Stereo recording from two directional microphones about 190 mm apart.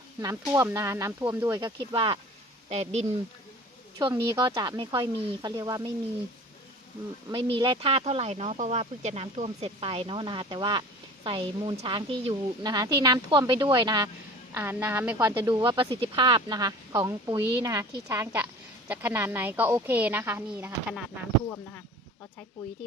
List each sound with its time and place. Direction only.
0.2 s a woman's voice: 20° right (ahead or behind)
1.9 s speech: 25° right (ahead or behind)
3.9 s speech: 15° right (ahead or behind)
7.5 s a woman's voice: 25° right (ahead or behind)
15.5 s a woman's voice: 25° right (ahead or behind)